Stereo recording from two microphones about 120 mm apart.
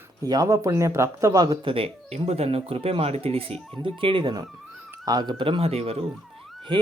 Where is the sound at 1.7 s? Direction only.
55° right (ahead or behind).